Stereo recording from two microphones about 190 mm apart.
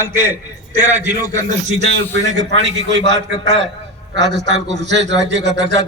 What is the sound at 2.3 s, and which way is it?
Speech, 70° right (ahead or behind).